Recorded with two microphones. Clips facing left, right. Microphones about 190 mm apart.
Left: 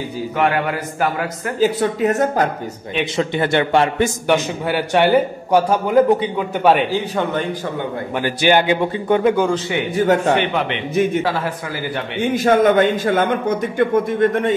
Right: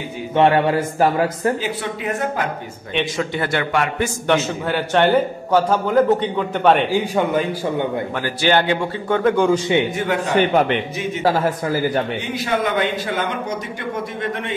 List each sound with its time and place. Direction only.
0.4 s speech: 30° right (ahead or behind)
1.6 s speech: 40° left (ahead or behind)
3.2 s a man's voice: 25° left (ahead or behind)
4.3 s a man's voice: 10° left (ahead or behind)
8.2 s a man's voice: 15° left (ahead or behind)
9.9 s speech: 40° left (ahead or behind)
10.3 s a man's voice: 45° right (ahead or behind)
12.2 s a man's voice: 50° left (ahead or behind)